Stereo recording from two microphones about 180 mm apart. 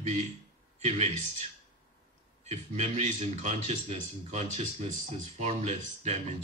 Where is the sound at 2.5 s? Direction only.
40° right (ahead or behind).